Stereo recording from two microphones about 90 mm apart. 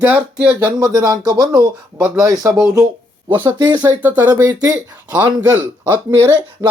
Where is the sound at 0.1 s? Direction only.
15° right (ahead or behind).